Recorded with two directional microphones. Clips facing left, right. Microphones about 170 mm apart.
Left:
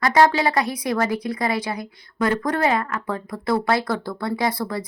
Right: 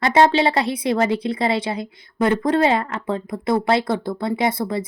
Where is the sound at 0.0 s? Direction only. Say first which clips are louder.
Right 2 dB; 25° right (ahead or behind).